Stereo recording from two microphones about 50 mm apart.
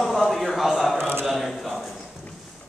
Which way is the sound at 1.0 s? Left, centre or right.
Right.